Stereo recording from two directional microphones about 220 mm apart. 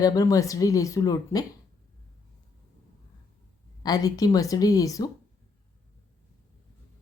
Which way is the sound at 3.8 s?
15° left (ahead or behind).